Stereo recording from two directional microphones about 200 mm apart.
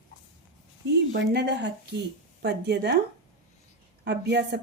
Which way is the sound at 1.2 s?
60° right (ahead or behind).